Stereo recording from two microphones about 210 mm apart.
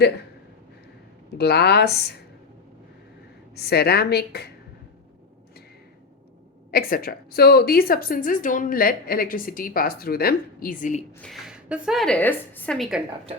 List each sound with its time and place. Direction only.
1.4 s a woman's voice: 50° left (ahead or behind)
3.5 s a woman's voice: 50° left (ahead or behind)
6.7 s a woman's voice: 45° left (ahead or behind)
11.2 s a woman's voice: centre (ahead or behind)